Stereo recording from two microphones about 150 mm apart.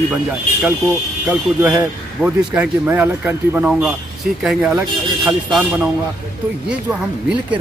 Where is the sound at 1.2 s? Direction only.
10° right (ahead or behind).